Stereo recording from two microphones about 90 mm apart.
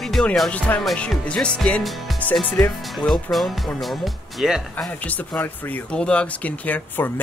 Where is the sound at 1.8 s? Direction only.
Centre (ahead or behind).